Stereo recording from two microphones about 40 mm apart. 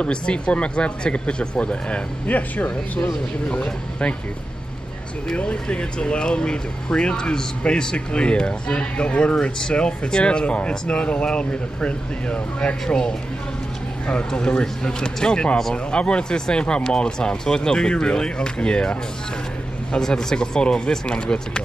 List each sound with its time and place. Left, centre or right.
0.0 s speech: left
2.2 s speech: left
5.3 s speech: left
20.0 s speech: centre